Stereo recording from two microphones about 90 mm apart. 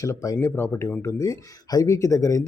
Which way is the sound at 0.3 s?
30° left (ahead or behind).